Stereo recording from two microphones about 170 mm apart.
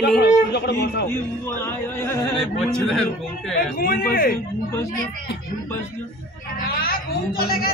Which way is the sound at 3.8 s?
60° left (ahead or behind).